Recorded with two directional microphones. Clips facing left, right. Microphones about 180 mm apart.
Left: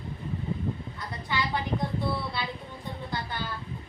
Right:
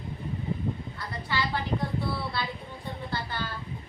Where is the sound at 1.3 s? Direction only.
20° left (ahead or behind).